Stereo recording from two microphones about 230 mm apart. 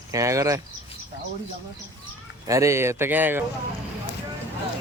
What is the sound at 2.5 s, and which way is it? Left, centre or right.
Speech, centre.